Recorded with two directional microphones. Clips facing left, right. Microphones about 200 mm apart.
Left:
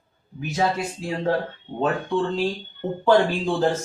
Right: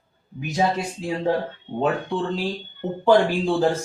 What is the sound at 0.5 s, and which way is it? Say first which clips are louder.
Speech: right 1 dB; 15° right (ahead or behind).